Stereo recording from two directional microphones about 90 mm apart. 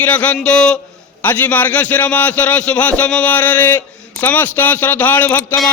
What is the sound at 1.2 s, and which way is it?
A man's voice, 20° left (ahead or behind).